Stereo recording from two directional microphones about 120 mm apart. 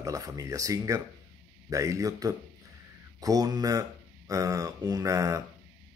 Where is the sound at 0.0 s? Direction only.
30° right (ahead or behind).